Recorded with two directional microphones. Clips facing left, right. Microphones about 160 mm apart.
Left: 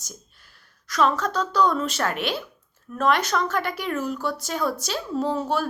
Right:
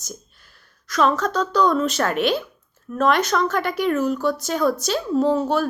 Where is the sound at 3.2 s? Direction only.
10° left (ahead or behind).